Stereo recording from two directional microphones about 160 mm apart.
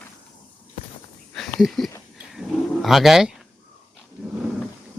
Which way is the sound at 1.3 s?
Centre (ahead or behind).